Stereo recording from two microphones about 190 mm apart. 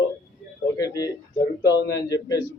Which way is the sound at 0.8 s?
20° left (ahead or behind).